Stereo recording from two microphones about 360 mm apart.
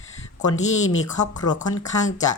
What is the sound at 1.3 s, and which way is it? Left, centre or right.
Speech, centre.